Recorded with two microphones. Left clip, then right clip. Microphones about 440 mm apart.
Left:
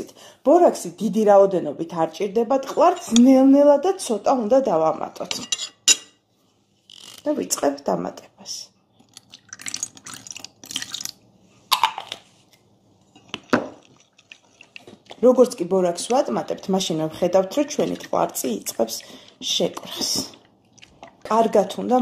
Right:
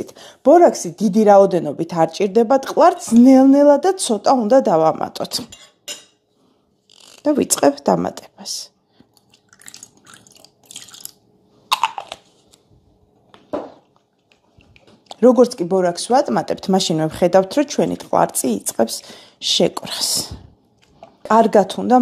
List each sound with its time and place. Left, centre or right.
0.1 s speech: right
7.2 s speech: right
15.0 s speech: right